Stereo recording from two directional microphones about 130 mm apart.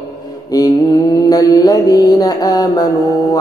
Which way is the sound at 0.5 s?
25° left (ahead or behind).